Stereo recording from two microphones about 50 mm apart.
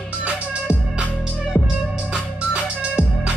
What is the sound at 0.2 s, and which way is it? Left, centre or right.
Music, right.